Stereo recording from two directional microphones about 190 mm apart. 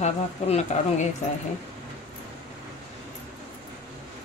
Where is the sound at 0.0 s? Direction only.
35° left (ahead or behind).